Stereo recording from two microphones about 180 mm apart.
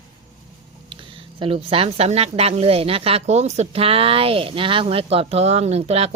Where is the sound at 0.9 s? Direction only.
30° right (ahead or behind).